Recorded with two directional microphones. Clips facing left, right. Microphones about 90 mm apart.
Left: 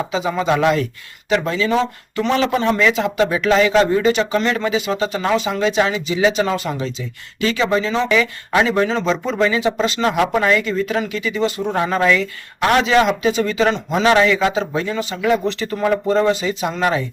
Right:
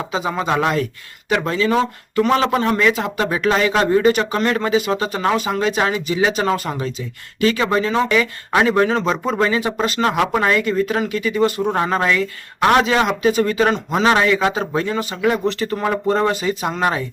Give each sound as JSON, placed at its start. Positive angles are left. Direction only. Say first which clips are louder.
{"t": 0.1, "sound": "speech", "louder": "even", "side_deg": -40}